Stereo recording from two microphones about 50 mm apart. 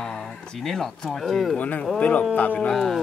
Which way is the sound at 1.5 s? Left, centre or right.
Left.